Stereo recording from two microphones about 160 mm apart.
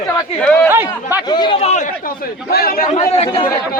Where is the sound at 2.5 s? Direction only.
70° left (ahead or behind).